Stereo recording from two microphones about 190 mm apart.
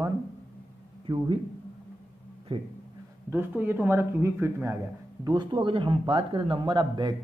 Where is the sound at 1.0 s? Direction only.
25° right (ahead or behind).